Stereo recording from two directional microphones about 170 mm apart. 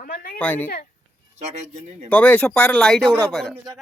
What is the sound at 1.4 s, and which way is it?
Speech, 40° right (ahead or behind).